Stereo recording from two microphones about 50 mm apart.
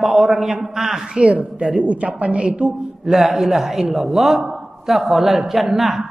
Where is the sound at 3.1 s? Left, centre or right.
Centre.